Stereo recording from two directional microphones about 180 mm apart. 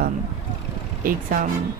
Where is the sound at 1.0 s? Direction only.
50° right (ahead or behind).